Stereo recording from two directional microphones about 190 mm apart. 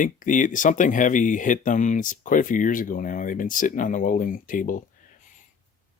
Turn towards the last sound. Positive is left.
turn(degrees=45)  # may be behind; listen again after turning